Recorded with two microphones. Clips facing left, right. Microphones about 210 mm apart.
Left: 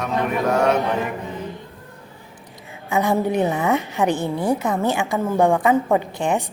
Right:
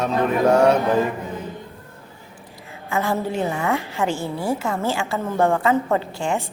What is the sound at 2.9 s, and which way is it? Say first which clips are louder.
A woman's voice: left 4 dB; 15° left (ahead or behind).